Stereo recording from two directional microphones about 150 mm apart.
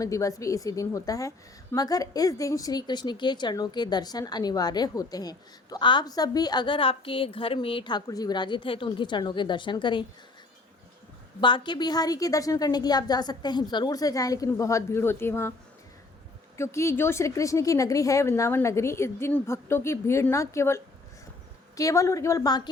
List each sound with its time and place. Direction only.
0.0 s a woman's voice: 20° left (ahead or behind)
11.3 s a woman's voice: 30° left (ahead or behind); by 15.5 s 15° left (ahead or behind)
16.6 s a woman's voice: 20° left (ahead or behind)